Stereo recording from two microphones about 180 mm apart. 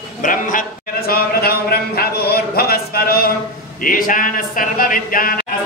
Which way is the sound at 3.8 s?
50° left (ahead or behind).